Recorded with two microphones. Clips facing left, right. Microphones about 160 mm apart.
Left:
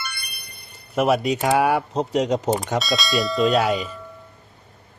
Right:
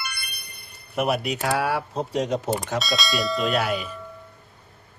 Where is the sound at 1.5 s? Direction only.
90° left.